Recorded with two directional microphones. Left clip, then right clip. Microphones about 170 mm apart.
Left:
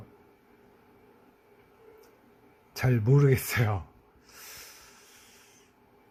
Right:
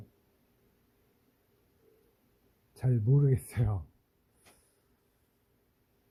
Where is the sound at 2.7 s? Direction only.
5° right (ahead or behind).